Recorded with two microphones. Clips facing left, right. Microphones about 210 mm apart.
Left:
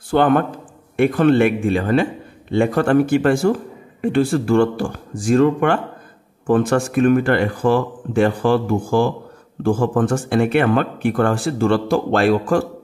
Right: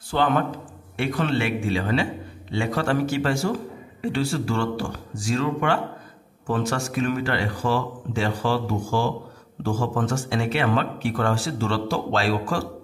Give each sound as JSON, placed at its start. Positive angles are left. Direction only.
{"t": 0.1, "sound": "a man's voice", "side_deg": 55}